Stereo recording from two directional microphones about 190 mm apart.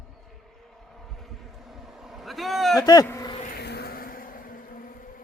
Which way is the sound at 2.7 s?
20° left (ahead or behind).